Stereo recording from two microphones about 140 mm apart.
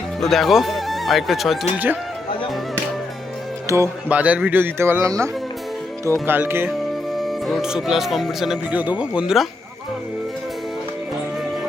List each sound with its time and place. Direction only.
0.2 s speech: centre (ahead or behind)
1.7 s a man's voice: 15° right (ahead or behind)
3.7 s speech: 20° right (ahead or behind)
4.1 s a man's voice: 10° right (ahead or behind)
6.7 s speech: centre (ahead or behind)